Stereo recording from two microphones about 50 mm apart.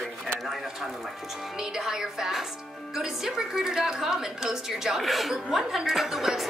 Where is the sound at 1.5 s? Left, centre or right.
Centre.